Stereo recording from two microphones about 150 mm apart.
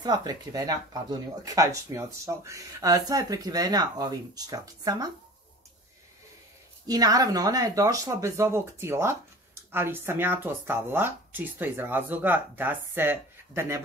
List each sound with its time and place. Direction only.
0.0 s speech: 25° right (ahead or behind)
6.9 s speech: 25° right (ahead or behind)